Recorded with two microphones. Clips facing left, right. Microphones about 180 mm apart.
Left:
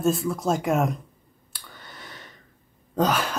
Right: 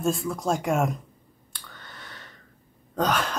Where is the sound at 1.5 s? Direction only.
10° left (ahead or behind).